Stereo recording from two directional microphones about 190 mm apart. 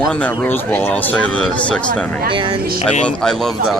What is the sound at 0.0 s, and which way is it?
Speech, 5° left (ahead or behind).